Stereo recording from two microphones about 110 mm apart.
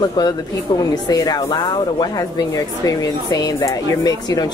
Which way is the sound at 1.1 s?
35° left (ahead or behind).